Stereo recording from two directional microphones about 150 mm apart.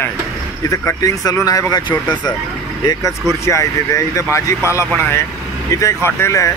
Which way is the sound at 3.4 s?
20° left (ahead or behind).